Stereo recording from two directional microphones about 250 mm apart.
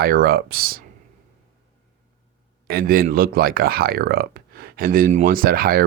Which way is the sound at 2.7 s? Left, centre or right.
Right.